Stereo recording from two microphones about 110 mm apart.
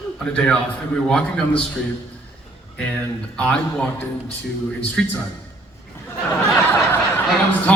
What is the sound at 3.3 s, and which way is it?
Speech, 10° left (ahead or behind).